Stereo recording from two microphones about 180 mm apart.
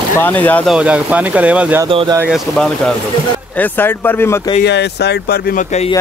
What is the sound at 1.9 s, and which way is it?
Speech, 30° right (ahead or behind).